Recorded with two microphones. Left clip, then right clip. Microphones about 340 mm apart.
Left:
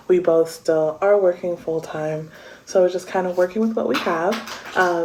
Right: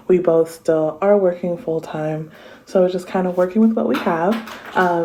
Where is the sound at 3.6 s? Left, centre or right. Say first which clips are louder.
Right 3 dB; centre.